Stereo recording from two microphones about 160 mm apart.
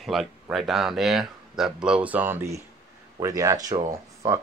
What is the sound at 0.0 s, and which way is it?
Speech, centre (ahead or behind).